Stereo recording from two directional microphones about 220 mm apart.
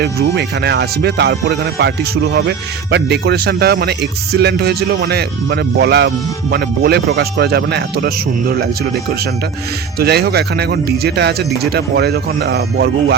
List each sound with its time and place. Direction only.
0.0 s speech: 45° right (ahead or behind)
2.9 s speech: 50° right (ahead or behind)
10.0 s speech: 45° right (ahead or behind)